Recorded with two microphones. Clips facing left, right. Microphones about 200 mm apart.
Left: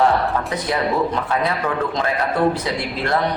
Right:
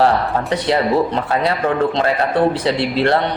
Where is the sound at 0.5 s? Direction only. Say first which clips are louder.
Right 8 dB; 30° right (ahead or behind).